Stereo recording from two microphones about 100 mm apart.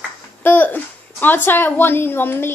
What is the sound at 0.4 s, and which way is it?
Speech, 20° left (ahead or behind).